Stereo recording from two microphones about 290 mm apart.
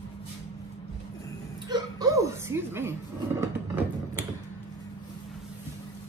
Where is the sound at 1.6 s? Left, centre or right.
Centre.